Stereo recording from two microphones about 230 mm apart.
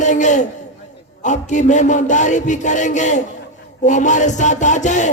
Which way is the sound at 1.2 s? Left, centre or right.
Left.